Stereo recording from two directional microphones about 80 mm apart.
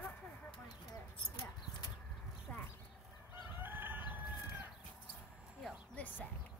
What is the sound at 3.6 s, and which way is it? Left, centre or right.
Chicken, right.